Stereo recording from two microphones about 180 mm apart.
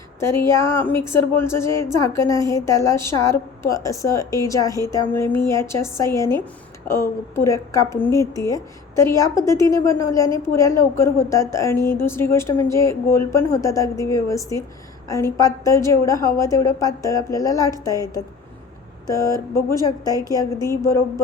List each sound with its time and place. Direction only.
0.2 s a woman's voice: 15° left (ahead or behind)